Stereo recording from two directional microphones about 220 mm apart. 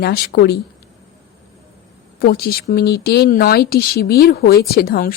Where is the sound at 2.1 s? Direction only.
45° left (ahead or behind).